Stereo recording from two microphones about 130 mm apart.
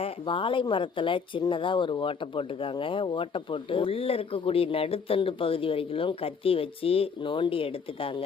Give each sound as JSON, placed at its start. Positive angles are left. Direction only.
{"t": 0.0, "sound": "speech", "side_deg": 40}